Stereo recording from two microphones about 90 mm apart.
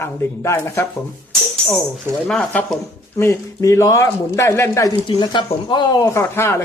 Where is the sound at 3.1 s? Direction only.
30° left (ahead or behind).